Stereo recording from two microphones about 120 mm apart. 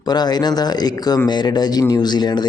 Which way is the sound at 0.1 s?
35° left (ahead or behind).